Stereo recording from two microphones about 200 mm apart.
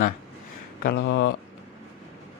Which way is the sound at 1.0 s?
65° left (ahead or behind).